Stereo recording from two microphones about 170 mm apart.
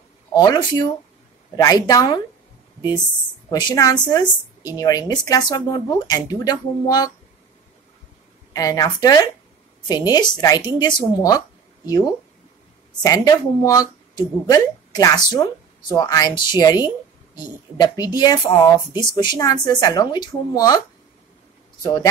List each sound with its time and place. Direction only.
0.3 s speech: 25° left (ahead or behind)
3.4 s speech: 25° left (ahead or behind)
8.5 s speech: 20° left (ahead or behind)
21.8 s speech: 25° left (ahead or behind)